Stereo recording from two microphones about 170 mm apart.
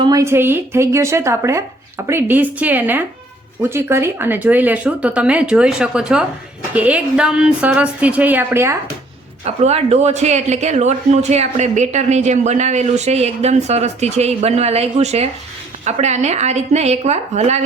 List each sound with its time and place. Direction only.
0.0 s speech: 20° right (ahead or behind)
9.4 s speech: 40° right (ahead or behind)